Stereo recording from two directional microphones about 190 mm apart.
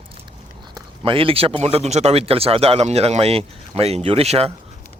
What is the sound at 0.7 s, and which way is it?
A man's voice, 30° right (ahead or behind).